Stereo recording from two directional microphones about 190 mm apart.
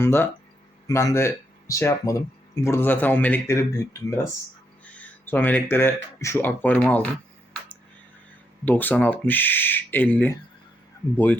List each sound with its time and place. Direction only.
0.0 s speech: 10° left (ahead or behind)
8.6 s speech: 10° left (ahead or behind)